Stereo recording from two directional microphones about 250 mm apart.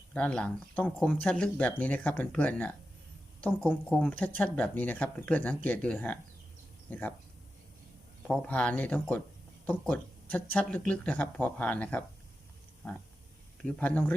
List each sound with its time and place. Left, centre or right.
0.1 s speech: centre
8.3 s speech: centre
13.7 s speech: centre